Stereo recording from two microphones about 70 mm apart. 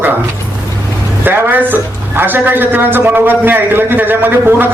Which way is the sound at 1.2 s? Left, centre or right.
Right.